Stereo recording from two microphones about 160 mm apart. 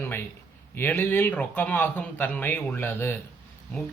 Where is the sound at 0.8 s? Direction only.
15° left (ahead or behind).